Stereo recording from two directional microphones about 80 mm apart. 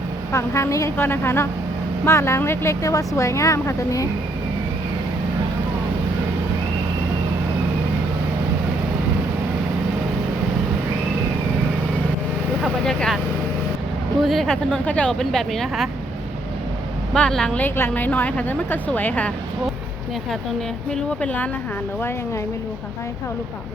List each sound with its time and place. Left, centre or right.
0.3 s speech: left
0.9 s a woman's voice: left
12.8 s speech: centre
14.2 s speech: centre
17.2 s speech: centre
17.6 s a woman's voice: left
20.9 s speech: centre